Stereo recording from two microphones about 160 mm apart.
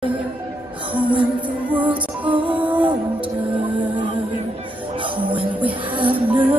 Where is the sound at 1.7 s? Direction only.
10° right (ahead or behind).